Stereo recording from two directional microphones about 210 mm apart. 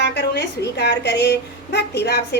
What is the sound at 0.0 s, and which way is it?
A woman's voice, 55° left (ahead or behind).